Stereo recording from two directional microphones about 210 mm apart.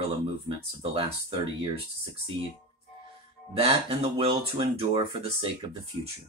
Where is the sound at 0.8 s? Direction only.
25° right (ahead or behind).